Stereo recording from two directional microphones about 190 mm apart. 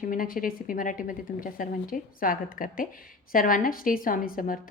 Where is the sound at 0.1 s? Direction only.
45° left (ahead or behind).